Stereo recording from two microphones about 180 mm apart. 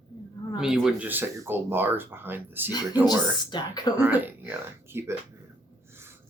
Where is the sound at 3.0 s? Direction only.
25° left (ahead or behind).